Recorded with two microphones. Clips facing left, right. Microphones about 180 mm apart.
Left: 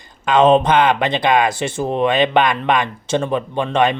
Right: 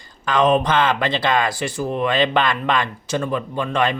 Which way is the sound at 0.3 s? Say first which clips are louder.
Left 4 dB; 25° left (ahead or behind).